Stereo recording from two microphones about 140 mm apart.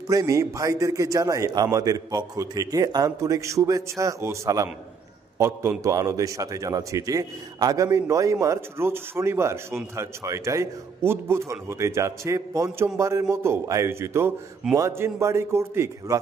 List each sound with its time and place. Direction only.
0.1 s a man's voice: 25° right (ahead or behind)